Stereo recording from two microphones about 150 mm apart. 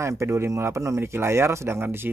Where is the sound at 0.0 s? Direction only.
20° right (ahead or behind).